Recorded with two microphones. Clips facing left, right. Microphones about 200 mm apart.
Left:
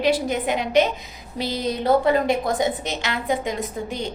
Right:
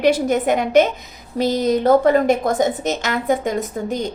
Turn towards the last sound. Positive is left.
turn(degrees=-45)  # may be behind; listen again after turning